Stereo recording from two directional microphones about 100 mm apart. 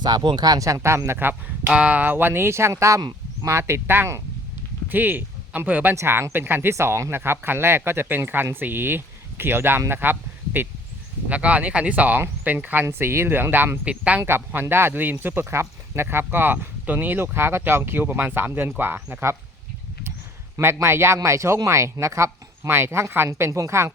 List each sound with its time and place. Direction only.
0.0 s speech: 50° right (ahead or behind); by 14.2 s 15° right (ahead or behind)
14.2 s speech: 25° right (ahead or behind)
20.7 s speech: 25° right (ahead or behind)